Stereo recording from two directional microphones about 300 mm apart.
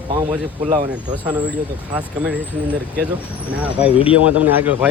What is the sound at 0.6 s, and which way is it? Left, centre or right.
Speech, centre.